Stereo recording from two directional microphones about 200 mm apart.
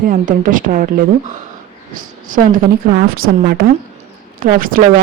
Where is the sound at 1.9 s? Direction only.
45° right (ahead or behind).